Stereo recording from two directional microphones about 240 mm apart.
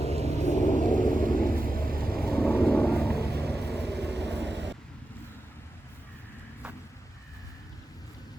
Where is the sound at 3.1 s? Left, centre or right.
Right.